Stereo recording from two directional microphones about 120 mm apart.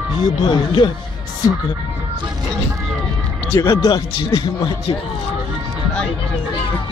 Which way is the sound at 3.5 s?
25° left (ahead or behind).